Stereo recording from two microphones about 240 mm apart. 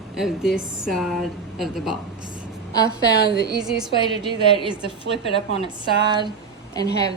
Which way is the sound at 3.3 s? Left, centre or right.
Right.